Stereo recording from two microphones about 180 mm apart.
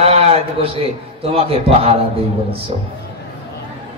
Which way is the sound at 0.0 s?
35° right (ahead or behind).